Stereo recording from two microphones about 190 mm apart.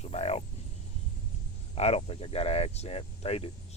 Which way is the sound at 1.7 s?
30° left (ahead or behind).